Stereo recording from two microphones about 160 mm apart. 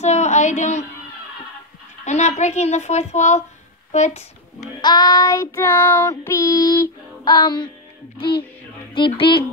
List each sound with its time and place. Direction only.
0.0 s speech: 45° left (ahead or behind)
2.0 s a child's voice: 45° left (ahead or behind)
4.8 s child singing: 25° left (ahead or behind)
8.2 s a woman's voice: 30° left (ahead or behind)